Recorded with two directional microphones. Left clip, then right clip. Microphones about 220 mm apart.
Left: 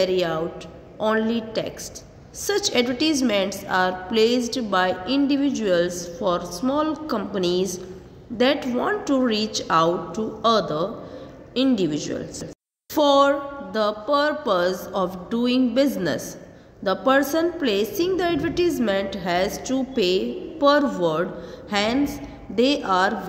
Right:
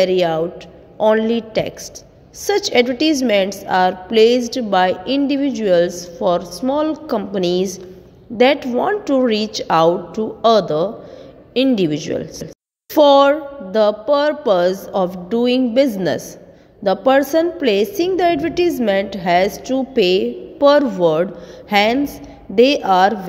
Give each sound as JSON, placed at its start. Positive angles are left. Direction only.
{"t": 0.0, "sound": "a woman's voice", "side_deg": -30}